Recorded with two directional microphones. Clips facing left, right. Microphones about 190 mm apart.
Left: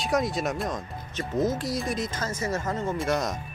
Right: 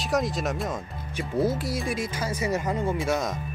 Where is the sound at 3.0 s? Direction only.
5° right (ahead or behind).